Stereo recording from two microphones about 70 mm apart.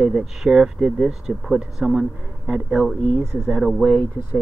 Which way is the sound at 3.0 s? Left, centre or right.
Right.